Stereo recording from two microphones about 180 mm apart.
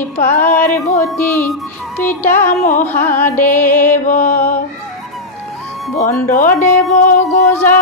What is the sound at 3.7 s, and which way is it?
Music, 45° left (ahead or behind).